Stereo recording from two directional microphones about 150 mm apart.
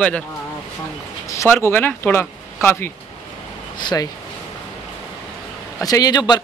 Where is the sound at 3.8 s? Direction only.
30° left (ahead or behind).